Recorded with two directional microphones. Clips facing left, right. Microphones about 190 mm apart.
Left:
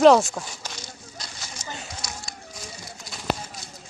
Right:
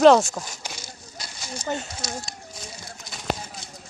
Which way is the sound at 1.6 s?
30° right (ahead or behind).